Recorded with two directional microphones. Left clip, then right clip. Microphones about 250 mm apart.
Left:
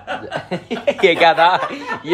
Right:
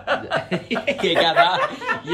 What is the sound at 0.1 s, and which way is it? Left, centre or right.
Speech, centre.